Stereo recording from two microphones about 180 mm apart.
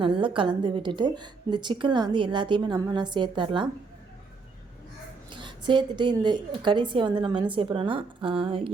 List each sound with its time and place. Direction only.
0.0 s a woman's voice: 30° right (ahead or behind)
5.3 s a woman's voice: 25° right (ahead or behind)